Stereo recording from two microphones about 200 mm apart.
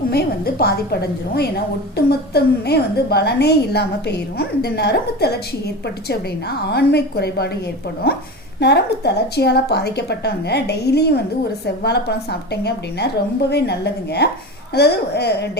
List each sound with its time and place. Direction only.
0.1 s a woman's voice: 50° left (ahead or behind)
2.0 s a woman's voice: 55° left (ahead or behind)
8.6 s a woman's voice: 55° left (ahead or behind)